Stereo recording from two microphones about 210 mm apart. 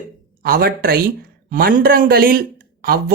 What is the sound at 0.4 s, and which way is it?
Speech, 45° right (ahead or behind).